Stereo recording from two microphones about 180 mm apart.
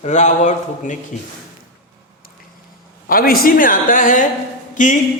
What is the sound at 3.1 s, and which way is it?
A woman's voice, 55° left (ahead or behind).